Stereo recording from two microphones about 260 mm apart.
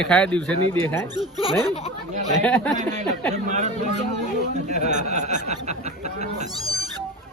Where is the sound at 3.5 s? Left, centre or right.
Right.